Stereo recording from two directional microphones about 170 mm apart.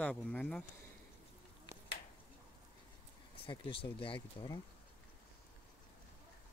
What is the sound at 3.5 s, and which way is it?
Speech, 30° left (ahead or behind).